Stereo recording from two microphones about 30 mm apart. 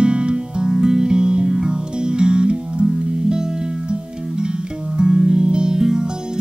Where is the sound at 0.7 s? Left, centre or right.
Right.